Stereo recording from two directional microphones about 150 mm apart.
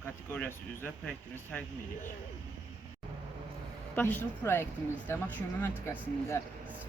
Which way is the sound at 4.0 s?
10° left (ahead or behind).